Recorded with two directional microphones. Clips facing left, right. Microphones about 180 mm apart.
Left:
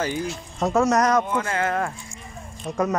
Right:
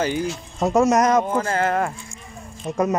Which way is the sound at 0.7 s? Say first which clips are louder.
Right 3 dB; 20° right (ahead or behind).